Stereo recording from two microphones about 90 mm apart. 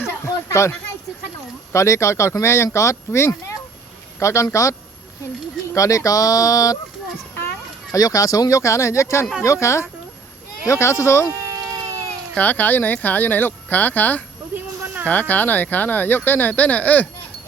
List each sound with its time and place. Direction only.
0.0 s a sound: 30° left (ahead or behind)
1.7 s speech: 35° left (ahead or behind)
5.7 s speech: 35° left (ahead or behind)
7.9 s speech: 40° left (ahead or behind)
11.3 s cat: 35° right (ahead or behind)
12.4 s speech: 20° left (ahead or behind)
14.5 s a sound: 20° right (ahead or behind)
15.0 s speech: 20° left (ahead or behind)